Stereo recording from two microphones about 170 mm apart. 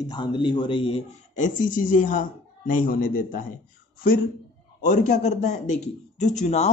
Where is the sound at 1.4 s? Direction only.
50° left (ahead or behind).